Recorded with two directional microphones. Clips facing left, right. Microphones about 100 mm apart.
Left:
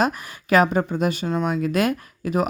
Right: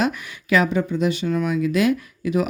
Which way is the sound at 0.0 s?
40° left (ahead or behind).